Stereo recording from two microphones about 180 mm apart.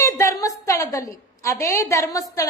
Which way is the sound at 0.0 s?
15° left (ahead or behind).